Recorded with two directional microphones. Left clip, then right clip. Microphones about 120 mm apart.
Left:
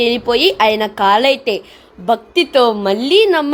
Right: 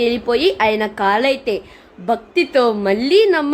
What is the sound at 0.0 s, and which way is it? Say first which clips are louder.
A woman's voice: left 3 dB; 30° left (ahead or behind).